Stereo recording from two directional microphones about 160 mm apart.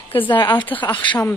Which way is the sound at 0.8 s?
30° left (ahead or behind).